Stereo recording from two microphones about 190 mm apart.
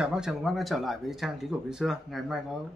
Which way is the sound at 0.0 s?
5° right (ahead or behind).